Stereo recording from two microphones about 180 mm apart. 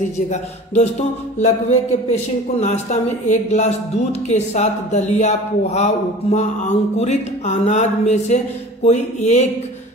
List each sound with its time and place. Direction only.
0.3 s speech: 40° left (ahead or behind)
7.0 s speech: 40° left (ahead or behind)